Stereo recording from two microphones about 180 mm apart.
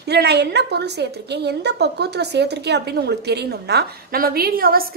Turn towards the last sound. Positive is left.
turn(degrees=-55)  # may be behind; listen again after turning